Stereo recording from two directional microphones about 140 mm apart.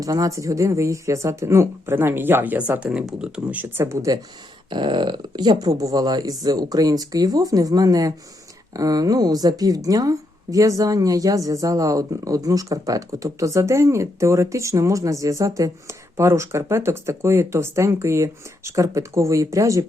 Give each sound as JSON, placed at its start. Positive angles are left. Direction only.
{"t": 0.0, "sound": "a woman's voice", "side_deg": -25}
{"t": 4.7, "sound": "a woman's voice", "side_deg": -35}